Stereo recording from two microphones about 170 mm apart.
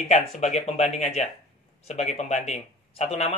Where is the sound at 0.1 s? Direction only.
40° left (ahead or behind).